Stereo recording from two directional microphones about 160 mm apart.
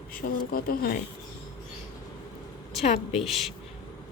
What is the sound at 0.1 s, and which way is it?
Speech, 65° left (ahead or behind).